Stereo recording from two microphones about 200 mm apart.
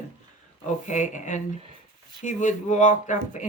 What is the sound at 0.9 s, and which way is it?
Speech, 40° left (ahead or behind).